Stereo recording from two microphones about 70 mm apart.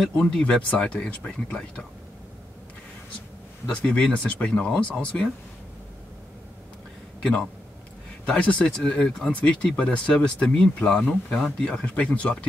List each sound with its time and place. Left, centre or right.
0.0 s speech: centre
3.7 s speech: centre
8.4 s speech: centre